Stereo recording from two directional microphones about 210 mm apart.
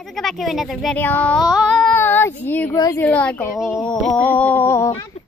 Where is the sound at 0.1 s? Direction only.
Centre (ahead or behind).